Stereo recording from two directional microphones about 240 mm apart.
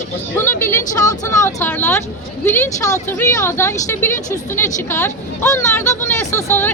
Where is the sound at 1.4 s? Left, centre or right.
Centre.